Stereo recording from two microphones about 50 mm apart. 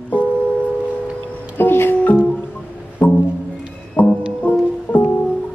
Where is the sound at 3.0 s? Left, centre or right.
Left.